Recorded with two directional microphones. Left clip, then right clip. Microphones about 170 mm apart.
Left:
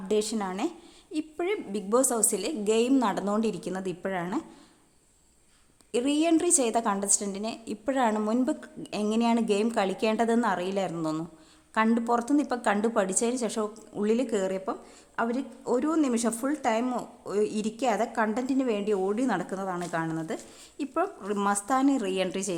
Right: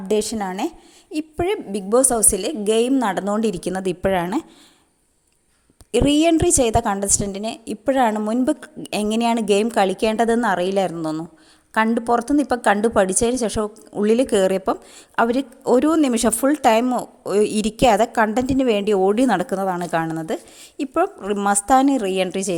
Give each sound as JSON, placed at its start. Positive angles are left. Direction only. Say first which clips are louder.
{"t": 0.1, "sound": "speech", "louder": "right 7 dB", "side_deg": -30}
{"t": 5.9, "sound": "speech", "louder": "right 9 dB", "side_deg": -35}